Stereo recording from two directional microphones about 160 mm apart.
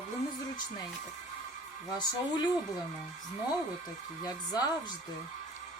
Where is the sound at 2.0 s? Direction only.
30° left (ahead or behind).